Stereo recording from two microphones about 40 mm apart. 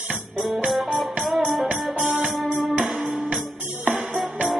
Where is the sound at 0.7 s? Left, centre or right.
Centre.